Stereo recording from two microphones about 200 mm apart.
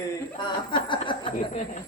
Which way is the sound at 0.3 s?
25° left (ahead or behind).